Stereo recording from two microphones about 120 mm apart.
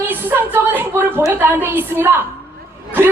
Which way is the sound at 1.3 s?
15° right (ahead or behind).